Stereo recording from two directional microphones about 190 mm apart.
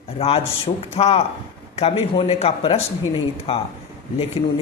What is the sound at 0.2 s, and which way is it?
Speech, 30° left (ahead or behind).